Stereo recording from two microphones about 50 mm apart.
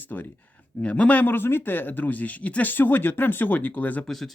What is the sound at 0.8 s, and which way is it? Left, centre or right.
Speech, left.